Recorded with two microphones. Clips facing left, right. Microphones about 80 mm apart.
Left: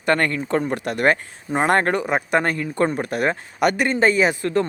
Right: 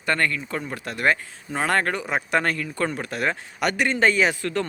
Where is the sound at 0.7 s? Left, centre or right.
Left.